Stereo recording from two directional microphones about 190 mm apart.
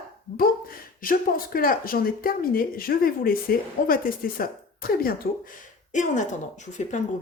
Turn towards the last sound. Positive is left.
turn(degrees=40)  # may be behind; listen again after turning